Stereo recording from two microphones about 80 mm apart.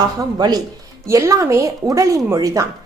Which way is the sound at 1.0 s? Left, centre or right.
Right.